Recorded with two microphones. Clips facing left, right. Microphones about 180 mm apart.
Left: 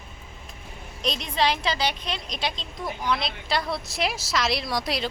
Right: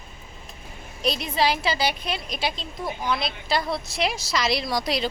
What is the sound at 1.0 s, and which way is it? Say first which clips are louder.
A woman's voice: right 2 dB; 5° right (ahead or behind).